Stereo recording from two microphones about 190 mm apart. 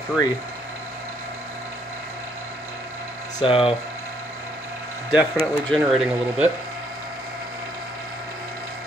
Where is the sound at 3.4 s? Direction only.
30° left (ahead or behind).